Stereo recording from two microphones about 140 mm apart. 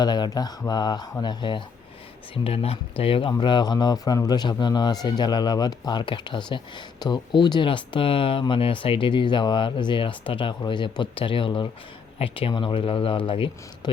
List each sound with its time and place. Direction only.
0.0 s mantra: 30° left (ahead or behind)
0.7 s speech: 30° left (ahead or behind)